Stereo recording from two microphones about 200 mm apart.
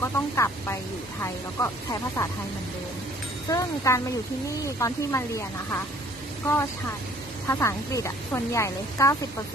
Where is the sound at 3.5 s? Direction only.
15° left (ahead or behind).